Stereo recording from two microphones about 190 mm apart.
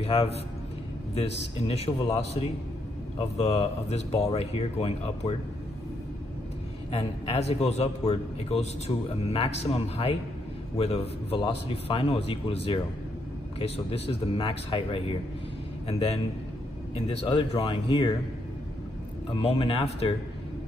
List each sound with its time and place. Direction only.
0.0 s a man's voice: 30° left (ahead or behind)
6.9 s a man's voice: 30° left (ahead or behind)
13.6 s speech: 30° left (ahead or behind)
17.3 s speech: 25° left (ahead or behind)
19.3 s a man's voice: 30° left (ahead or behind)